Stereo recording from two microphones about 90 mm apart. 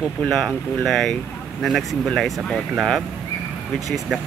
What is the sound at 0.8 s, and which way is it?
Speech, 5° left (ahead or behind).